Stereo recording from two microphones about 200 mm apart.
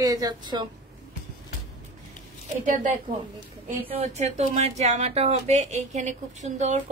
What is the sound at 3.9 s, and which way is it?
Speech, 35° right (ahead or behind).